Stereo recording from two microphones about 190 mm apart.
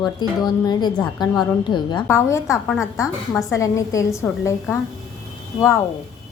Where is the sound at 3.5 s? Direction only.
15° left (ahead or behind).